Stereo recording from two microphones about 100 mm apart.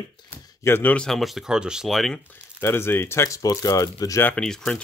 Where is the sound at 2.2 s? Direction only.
20° left (ahead or behind).